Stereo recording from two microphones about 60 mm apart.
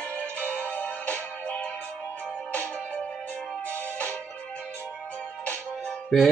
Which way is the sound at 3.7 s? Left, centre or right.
Left.